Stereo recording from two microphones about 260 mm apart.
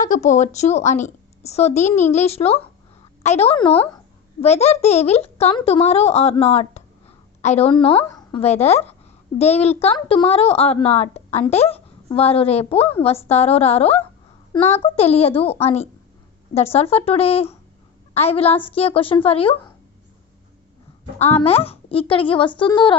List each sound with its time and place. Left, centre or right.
0.0 s a woman's voice: left
21.2 s speech: left